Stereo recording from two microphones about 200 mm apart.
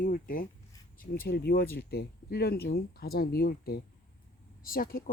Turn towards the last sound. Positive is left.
turn(degrees=45)  # may be behind; listen again after turning